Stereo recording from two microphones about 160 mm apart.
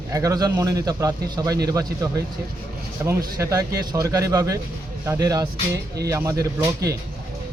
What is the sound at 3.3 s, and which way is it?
Speech, 20° right (ahead or behind).